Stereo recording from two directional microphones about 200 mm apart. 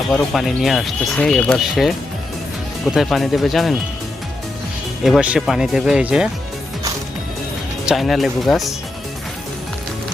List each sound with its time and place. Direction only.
0.1 s speech: centre (ahead or behind)
5.0 s speech: 5° right (ahead or behind)
7.9 s speech: centre (ahead or behind)